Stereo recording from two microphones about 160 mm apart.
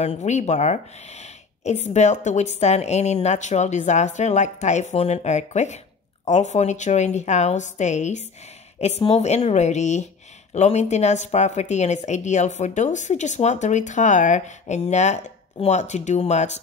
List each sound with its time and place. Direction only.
0.0 s speech: 45° left (ahead or behind)